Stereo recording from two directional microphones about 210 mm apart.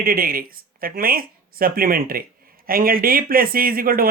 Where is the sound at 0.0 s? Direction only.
45° right (ahead or behind).